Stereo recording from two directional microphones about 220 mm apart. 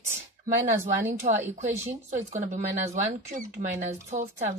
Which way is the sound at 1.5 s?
30° right (ahead or behind).